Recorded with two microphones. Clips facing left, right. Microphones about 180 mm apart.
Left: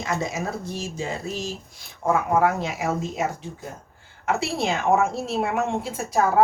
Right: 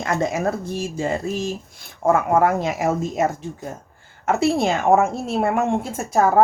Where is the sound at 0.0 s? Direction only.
55° right (ahead or behind).